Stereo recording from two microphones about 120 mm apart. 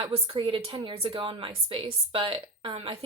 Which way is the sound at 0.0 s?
50° right (ahead or behind).